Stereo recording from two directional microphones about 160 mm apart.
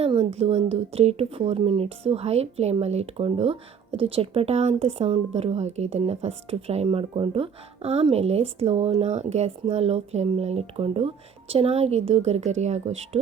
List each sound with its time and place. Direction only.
0.0 s a woman's voice: 40° right (ahead or behind)